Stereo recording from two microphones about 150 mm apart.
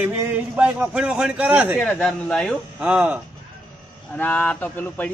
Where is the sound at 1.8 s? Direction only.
5° left (ahead or behind).